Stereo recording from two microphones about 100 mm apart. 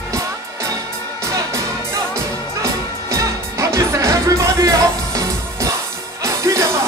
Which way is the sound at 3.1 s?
30° right (ahead or behind).